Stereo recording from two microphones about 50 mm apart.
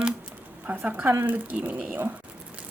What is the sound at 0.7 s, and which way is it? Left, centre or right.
Speech, right.